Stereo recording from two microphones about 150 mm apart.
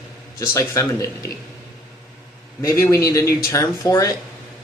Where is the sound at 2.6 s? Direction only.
20° left (ahead or behind).